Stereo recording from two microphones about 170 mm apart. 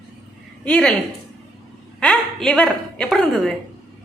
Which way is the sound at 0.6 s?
5° left (ahead or behind).